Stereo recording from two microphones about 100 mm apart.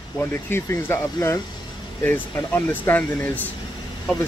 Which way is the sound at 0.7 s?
30° left (ahead or behind).